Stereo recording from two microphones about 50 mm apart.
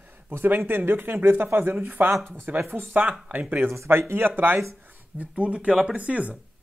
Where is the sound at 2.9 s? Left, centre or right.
Right.